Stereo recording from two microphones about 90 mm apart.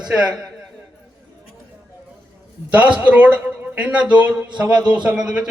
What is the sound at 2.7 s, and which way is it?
A man's voice, 15° right (ahead or behind).